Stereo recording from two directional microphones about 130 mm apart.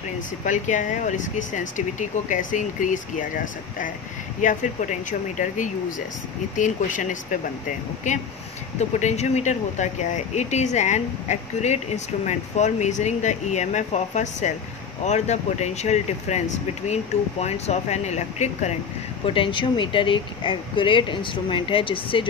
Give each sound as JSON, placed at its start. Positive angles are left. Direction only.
{"t": 0.5, "sound": "speech", "side_deg": 75}
{"t": 4.4, "sound": "speech", "side_deg": 80}
{"t": 8.7, "sound": "speech", "side_deg": 60}
{"t": 19.2, "sound": "speech", "side_deg": 45}